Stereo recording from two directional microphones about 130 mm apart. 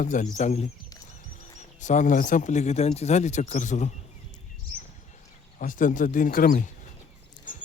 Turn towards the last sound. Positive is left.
turn(degrees=90)